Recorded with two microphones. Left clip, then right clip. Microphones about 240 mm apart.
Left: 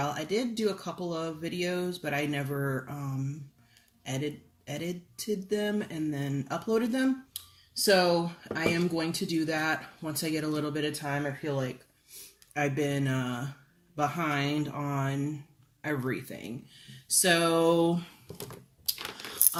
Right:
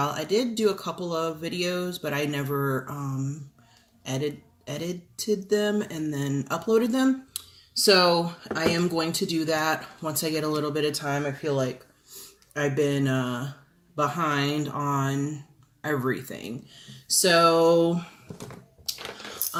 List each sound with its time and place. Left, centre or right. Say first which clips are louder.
0.0 s speech: right 5 dB; centre
17.2 s a sound: right 6 dB; centre
19.5 s keys jangling: right 4 dB; left